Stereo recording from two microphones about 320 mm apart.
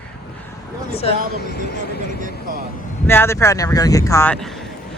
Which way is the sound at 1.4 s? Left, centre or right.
Left.